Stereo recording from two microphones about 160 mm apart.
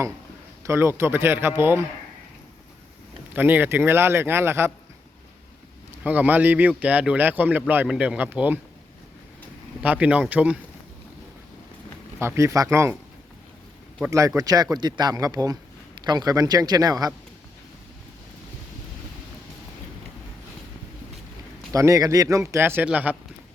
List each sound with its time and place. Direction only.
0.7 s speech: 15° right (ahead or behind)
3.3 s speech: 10° right (ahead or behind)
6.0 s speech: 10° right (ahead or behind)
9.8 s speech: 10° right (ahead or behind)
12.2 s speech: 15° right (ahead or behind)
14.1 s speech: 20° right (ahead or behind)
21.7 s speech: 20° right (ahead or behind)